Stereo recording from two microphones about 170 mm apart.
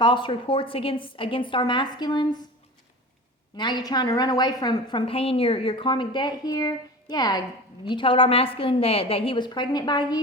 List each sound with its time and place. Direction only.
0.0 s a woman's voice: 30° left (ahead or behind)
3.6 s a woman's voice: 25° left (ahead or behind)